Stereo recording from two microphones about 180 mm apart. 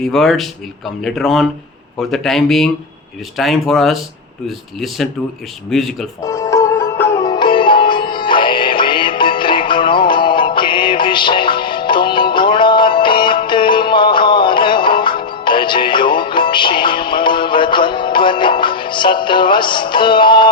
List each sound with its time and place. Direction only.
0.0 s speech: centre (ahead or behind)
6.2 s sitar: 15° left (ahead or behind)